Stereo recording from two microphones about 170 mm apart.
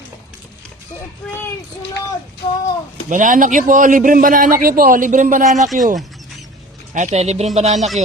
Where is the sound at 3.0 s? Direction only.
50° right (ahead or behind).